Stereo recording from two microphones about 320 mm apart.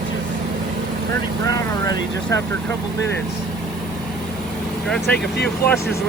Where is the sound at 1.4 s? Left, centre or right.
Centre.